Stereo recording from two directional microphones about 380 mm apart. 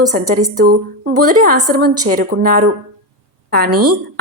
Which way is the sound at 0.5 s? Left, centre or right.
Right.